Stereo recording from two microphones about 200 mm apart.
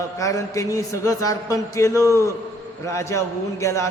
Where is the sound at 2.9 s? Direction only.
15° left (ahead or behind).